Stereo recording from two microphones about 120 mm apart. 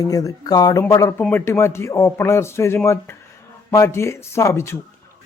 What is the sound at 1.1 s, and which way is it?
A man's voice, 15° left (ahead or behind).